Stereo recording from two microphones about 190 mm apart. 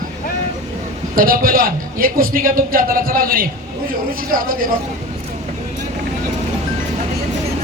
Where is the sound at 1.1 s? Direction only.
50° right (ahead or behind).